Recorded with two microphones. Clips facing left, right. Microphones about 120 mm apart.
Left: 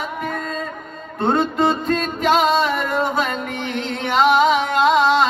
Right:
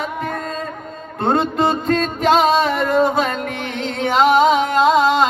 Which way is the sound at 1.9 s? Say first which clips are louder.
Right 2 dB; 35° right (ahead or behind).